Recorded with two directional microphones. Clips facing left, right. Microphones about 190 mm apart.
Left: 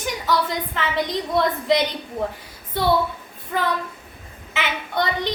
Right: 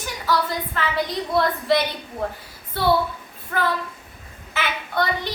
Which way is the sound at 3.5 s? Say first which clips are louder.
Even; 15° left (ahead or behind).